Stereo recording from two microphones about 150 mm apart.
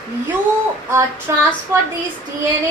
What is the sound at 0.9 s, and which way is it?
Speech, 20° right (ahead or behind).